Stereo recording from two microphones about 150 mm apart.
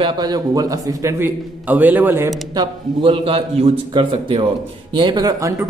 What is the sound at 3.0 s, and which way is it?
A man's voice, 35° right (ahead or behind).